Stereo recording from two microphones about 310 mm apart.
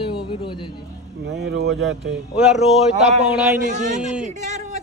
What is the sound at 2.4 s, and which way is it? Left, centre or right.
Speech, centre.